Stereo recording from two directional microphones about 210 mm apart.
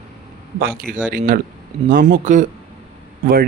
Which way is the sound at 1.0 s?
40° right (ahead or behind).